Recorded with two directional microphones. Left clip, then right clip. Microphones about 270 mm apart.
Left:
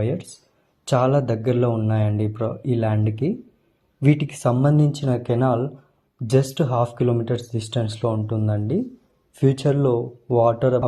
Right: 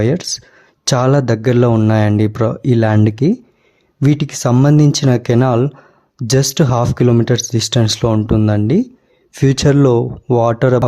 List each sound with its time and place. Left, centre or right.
0.0 s speech: right
4.0 s speech: right